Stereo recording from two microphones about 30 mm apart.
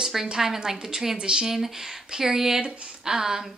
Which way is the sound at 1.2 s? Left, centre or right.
Right.